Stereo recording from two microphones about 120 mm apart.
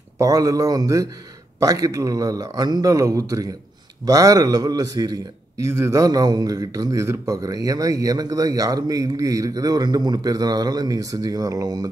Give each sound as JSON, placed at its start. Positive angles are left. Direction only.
{"t": 0.2, "sound": "a man's voice", "side_deg": -30}